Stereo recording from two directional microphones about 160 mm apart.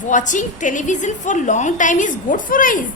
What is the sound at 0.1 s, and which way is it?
A woman's voice, 50° left (ahead or behind).